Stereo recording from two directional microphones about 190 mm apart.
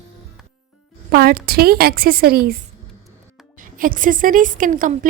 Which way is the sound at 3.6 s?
45° right (ahead or behind).